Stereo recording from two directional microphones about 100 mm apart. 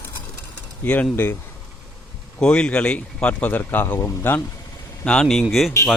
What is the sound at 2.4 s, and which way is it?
Speech, 10° left (ahead or behind).